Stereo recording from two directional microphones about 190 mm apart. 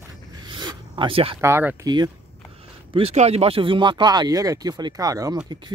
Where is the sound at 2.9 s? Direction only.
30° right (ahead or behind).